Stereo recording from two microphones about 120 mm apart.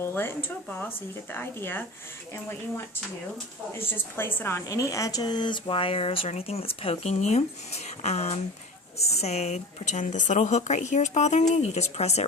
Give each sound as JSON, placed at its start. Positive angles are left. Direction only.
{"t": 0.0, "sound": "speech", "side_deg": 20}